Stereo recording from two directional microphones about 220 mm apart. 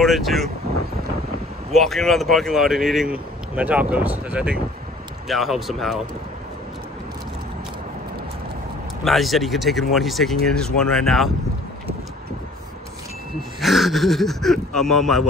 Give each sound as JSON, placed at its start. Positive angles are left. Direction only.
{"t": 0.0, "sound": "speech", "side_deg": 0}
{"t": 1.7, "sound": "speech", "side_deg": 0}
{"t": 9.0, "sound": "speech", "side_deg": 0}
{"t": 13.6, "sound": "speech", "side_deg": 0}